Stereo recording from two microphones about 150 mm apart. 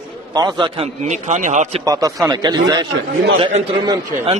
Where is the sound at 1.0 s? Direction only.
50° right (ahead or behind).